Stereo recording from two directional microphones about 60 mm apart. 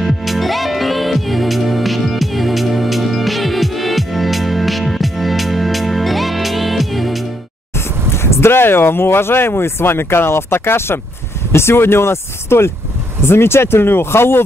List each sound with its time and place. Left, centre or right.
0.0 s music: centre
8.1 s speech: left